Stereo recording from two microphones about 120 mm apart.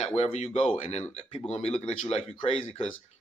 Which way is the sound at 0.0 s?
60° left (ahead or behind).